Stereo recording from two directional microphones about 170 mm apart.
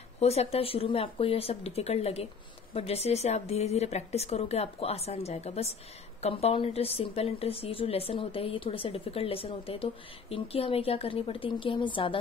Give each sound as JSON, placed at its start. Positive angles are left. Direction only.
{"t": 0.2, "sound": "a woman's voice", "side_deg": 40}